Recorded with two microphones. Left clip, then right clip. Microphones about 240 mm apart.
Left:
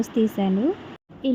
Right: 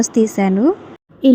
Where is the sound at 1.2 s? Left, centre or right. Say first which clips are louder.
Right 12 dB; right.